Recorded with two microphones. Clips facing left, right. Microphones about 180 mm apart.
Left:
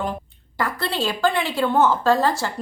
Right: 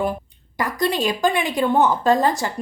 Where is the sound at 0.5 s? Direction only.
15° right (ahead or behind).